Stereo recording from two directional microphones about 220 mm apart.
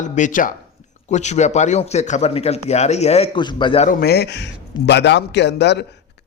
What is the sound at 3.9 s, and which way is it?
A man's voice, 45° left (ahead or behind).